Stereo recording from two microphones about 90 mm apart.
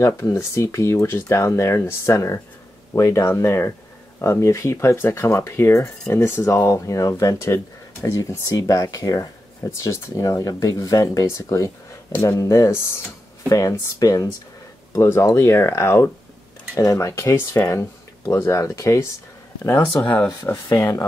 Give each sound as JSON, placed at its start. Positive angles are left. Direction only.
{"t": 0.0, "sound": "speech", "side_deg": 35}
{"t": 12.1, "sound": "speech", "side_deg": 25}
{"t": 12.4, "sound": "speech", "side_deg": 35}
{"t": 20.0, "sound": "speech", "side_deg": 20}